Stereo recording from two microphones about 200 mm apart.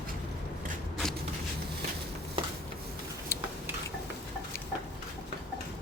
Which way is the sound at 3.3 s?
15° left (ahead or behind).